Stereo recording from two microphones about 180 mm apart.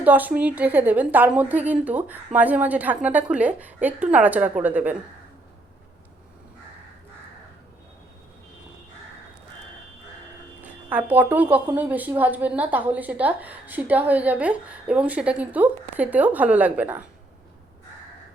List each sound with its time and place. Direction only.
0.0 s a woman's voice: 10° right (ahead or behind)
10.6 s a woman's voice: 10° right (ahead or behind)